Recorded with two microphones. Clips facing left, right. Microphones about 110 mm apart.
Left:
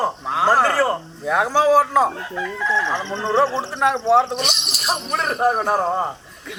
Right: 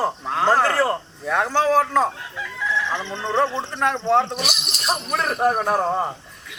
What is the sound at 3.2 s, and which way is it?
Speech, 15° left (ahead or behind).